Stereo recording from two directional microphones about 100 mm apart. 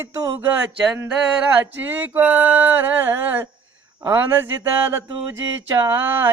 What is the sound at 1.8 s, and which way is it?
Speech, 20° right (ahead or behind).